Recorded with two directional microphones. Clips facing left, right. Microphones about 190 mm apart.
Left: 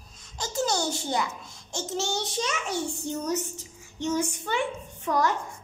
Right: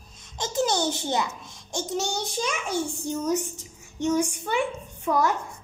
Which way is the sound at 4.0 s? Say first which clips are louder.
Right 3 dB; 10° right (ahead or behind).